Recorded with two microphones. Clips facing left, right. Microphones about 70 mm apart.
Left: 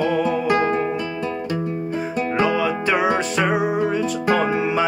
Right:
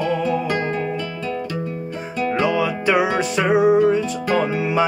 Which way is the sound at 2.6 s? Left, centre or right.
Centre.